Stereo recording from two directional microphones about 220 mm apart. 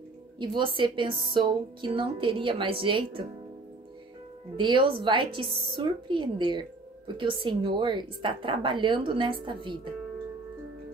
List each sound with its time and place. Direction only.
0.4 s speech: 20° right (ahead or behind)
4.6 s speech: 20° right (ahead or behind)